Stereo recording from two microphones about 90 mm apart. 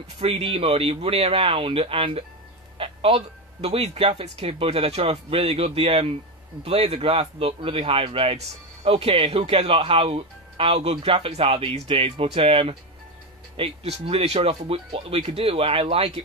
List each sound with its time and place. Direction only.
0.2 s speech: 90° right
2.8 s music: 90° right
3.7 s speech: 90° right